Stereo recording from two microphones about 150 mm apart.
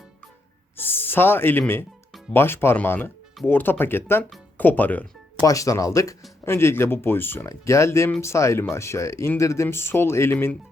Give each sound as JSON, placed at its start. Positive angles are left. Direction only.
{"t": 0.8, "sound": "speech", "side_deg": 15}
{"t": 5.4, "sound": "speech", "side_deg": 20}